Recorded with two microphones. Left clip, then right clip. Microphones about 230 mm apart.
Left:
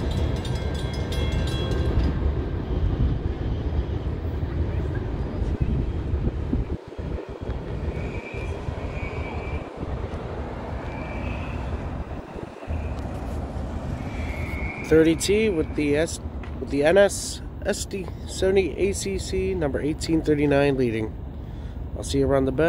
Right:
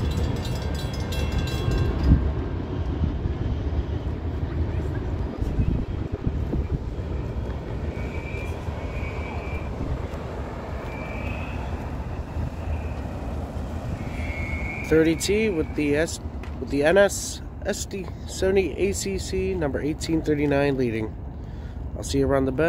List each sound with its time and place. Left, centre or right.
14.9 s speech: centre
18.4 s speech: centre
22.1 s speech: centre